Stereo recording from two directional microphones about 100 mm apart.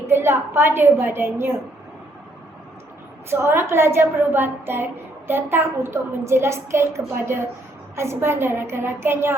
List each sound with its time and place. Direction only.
0.1 s a woman's voice: 25° right (ahead or behind)
3.2 s a woman's voice: 25° right (ahead or behind)